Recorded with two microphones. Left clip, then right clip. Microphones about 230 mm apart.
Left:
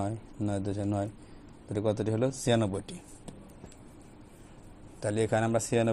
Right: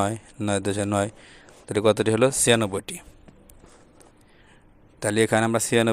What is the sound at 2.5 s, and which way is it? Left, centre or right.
Speech, right.